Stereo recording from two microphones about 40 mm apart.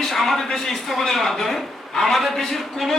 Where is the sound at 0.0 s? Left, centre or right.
Centre.